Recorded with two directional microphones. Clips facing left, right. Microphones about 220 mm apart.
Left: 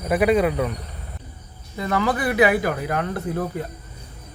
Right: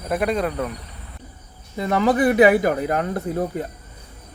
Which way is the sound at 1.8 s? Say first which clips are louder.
Right 4 dB; 20° right (ahead or behind).